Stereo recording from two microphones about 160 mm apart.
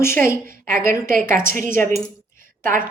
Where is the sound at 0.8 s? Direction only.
60° right (ahead or behind).